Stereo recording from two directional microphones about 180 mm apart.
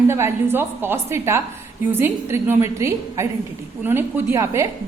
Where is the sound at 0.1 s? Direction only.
15° right (ahead or behind).